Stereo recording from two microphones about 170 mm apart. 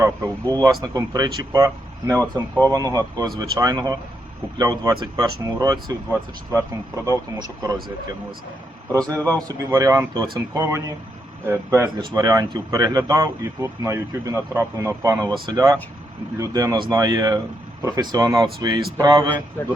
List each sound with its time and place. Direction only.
0.0 s speech: 20° right (ahead or behind)
8.9 s speech: 20° right (ahead or behind)
19.6 s speech: 15° left (ahead or behind)